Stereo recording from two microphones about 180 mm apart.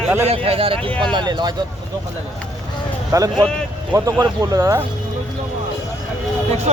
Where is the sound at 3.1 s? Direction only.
20° right (ahead or behind).